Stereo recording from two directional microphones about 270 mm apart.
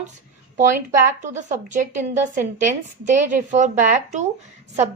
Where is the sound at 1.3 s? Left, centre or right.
Right.